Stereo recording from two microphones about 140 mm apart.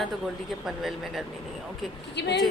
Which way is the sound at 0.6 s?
Centre (ahead or behind).